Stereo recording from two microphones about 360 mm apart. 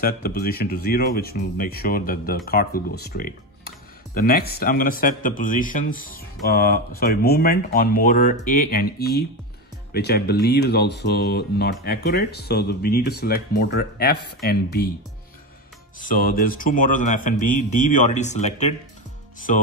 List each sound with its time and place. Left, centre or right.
0.0 s a man's voice: left
16.0 s a man's voice: left